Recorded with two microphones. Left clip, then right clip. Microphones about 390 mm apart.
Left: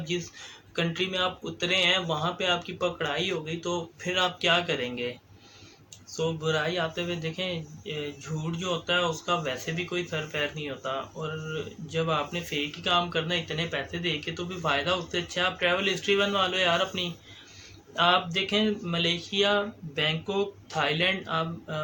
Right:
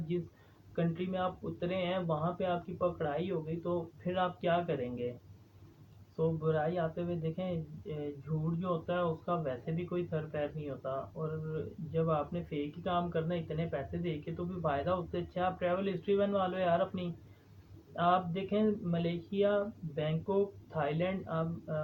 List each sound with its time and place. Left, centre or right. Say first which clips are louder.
0.8 s speech: left 7 dB; right
6.1 s speech: left 5 dB; right
20.7 s speech: left 9 dB; right